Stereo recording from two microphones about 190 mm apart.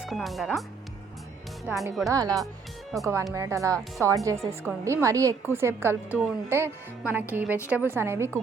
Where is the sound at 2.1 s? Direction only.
20° right (ahead or behind).